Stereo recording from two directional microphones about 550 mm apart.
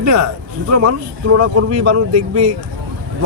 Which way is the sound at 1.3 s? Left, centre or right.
Right.